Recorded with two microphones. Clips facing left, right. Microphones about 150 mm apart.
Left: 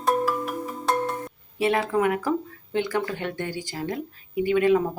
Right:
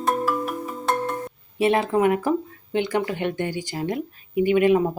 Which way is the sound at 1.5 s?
20° right (ahead or behind).